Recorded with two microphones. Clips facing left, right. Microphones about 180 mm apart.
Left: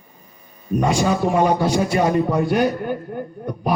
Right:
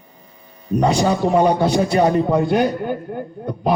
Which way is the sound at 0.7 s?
35° right (ahead or behind).